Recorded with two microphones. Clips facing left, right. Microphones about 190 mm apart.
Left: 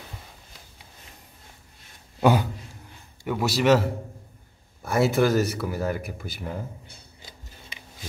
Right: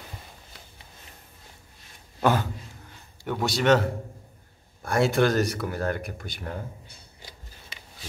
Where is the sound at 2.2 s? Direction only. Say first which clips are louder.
Left 3 dB; 15° left (ahead or behind).